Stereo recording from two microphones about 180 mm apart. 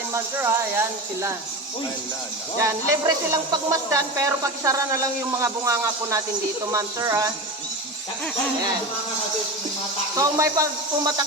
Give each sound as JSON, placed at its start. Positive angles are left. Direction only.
{"t": 0.1, "sound": "speech", "side_deg": -15}
{"t": 2.6, "sound": "speech", "side_deg": -15}
{"t": 10.2, "sound": "speech", "side_deg": -15}